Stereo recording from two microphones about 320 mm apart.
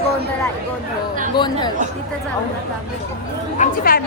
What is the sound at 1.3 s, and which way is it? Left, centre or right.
Speech, centre.